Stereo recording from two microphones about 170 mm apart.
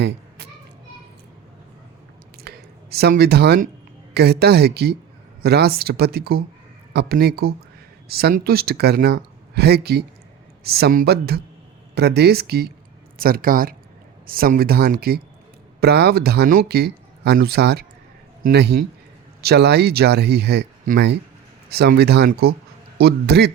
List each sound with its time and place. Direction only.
2.4 s a sound: 70° right (ahead or behind)
4.1 s speech: 70° right (ahead or behind)
20.9 s speech: 50° right (ahead or behind)
21.7 s speech: 70° right (ahead or behind)